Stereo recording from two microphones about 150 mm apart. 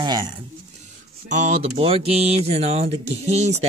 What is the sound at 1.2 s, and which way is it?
Speech, 55° right (ahead or behind).